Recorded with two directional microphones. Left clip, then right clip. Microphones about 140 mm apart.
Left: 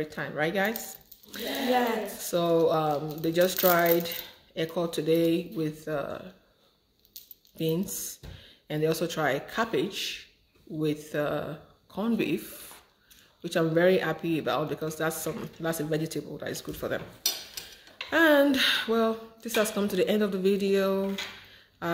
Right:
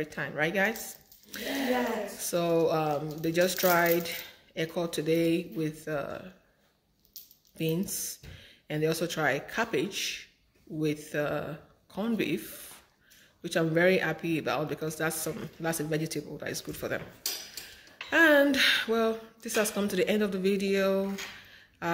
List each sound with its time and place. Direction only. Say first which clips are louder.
0.0 s a man's voice: left 1 dB; centre (ahead or behind)
1.3 s a sound: left 1 dB; centre (ahead or behind)
2.2 s a man's voice: left 2 dB; centre (ahead or behind)
7.5 s a man's voice: left 2 dB; centre (ahead or behind)
18.1 s a man's voice: even; centre (ahead or behind)
21.8 s a sound: even; centre (ahead or behind)